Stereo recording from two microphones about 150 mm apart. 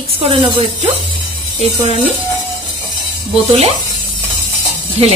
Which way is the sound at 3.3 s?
45° right (ahead or behind).